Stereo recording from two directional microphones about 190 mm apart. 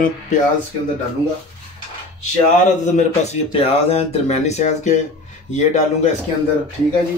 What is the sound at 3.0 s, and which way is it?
A man's voice, 35° left (ahead or behind).